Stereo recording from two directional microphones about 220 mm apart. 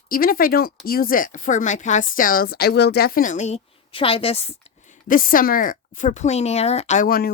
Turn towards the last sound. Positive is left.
turn(degrees=40)  # may be behind; listen again after turning